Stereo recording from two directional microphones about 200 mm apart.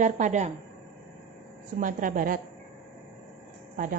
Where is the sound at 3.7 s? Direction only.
45° right (ahead or behind).